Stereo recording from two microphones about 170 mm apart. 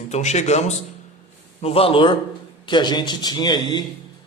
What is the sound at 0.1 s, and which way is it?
A man's voice, 40° left (ahead or behind).